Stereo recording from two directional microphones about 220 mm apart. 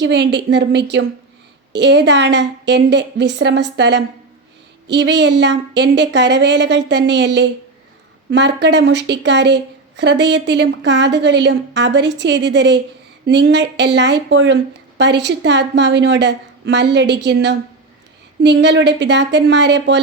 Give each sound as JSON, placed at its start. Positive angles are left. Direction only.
{"t": 0.0, "sound": "a woman's voice", "side_deg": -50}